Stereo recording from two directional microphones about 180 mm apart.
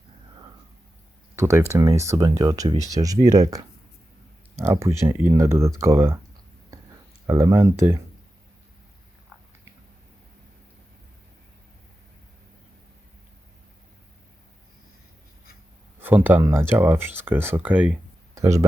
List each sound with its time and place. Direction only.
1.4 s speech: 15° right (ahead or behind)
7.3 s speech: 15° right (ahead or behind)
16.0 s speech: 10° right (ahead or behind)